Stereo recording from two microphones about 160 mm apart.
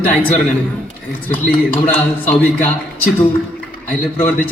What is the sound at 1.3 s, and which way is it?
A man's voice, 10° left (ahead or behind).